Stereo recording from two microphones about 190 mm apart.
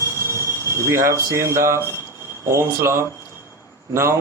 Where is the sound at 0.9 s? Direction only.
15° right (ahead or behind).